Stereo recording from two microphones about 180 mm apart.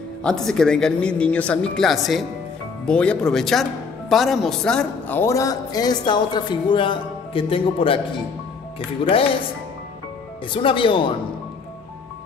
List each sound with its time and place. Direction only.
0.2 s a woman's voice: centre (ahead or behind); by 8.0 s 30° left (ahead or behind)
9.0 s a man's voice: 30° left (ahead or behind)
10.5 s a man's voice: 30° left (ahead or behind)